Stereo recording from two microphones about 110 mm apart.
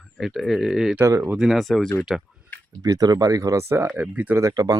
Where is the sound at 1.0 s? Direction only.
20° right (ahead or behind).